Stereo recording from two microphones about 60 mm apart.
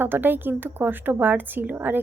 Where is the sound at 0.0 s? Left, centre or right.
Right.